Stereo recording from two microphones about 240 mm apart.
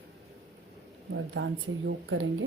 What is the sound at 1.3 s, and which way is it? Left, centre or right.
Speech, right.